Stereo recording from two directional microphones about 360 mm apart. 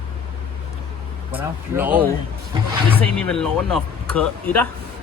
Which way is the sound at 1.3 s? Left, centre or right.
Centre.